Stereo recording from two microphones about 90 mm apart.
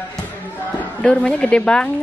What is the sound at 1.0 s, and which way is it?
Speech, 15° left (ahead or behind).